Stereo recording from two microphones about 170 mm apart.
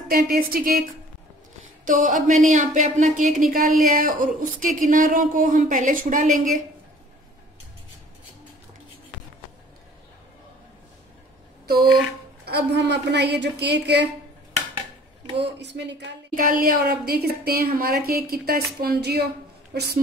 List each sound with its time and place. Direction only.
0.1 s a woman's voice: 60° right (ahead or behind)
1.9 s speech: 50° right (ahead or behind)
11.6 s speech: 65° right (ahead or behind)
12.4 s a woman's voice: 90° right
15.4 s a woman's voice: 85° right
16.3 s a woman's voice: 55° right (ahead or behind); by 20.0 s 70° right (ahead or behind)